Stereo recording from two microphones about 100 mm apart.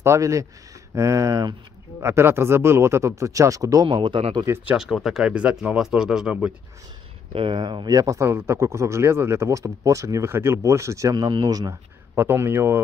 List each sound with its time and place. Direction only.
0.0 s speech: 30° right (ahead or behind)
3.8 s speech: 55° right (ahead or behind)
4.6 s speech: 5° right (ahead or behind)
7.3 s speech: 55° right (ahead or behind)
12.2 s speech: 20° right (ahead or behind)